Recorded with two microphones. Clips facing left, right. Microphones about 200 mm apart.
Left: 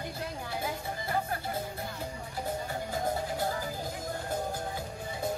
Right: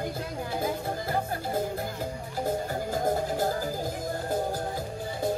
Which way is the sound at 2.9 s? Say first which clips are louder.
Right 5 dB; 40° right (ahead or behind).